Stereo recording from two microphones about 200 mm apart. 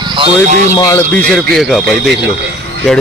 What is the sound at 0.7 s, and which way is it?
Speech, 15° left (ahead or behind).